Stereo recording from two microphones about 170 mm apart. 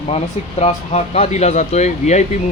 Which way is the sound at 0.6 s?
40° left (ahead or behind).